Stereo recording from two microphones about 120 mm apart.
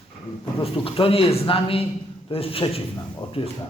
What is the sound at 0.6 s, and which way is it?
Speech, 50° left (ahead or behind).